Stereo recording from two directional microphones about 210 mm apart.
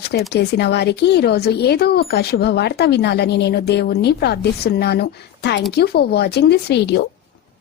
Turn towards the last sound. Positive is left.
turn(degrees=50)  # may be behind; listen again after turning